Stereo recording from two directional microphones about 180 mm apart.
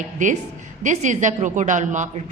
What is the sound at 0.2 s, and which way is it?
A man's voice, 45° right (ahead or behind).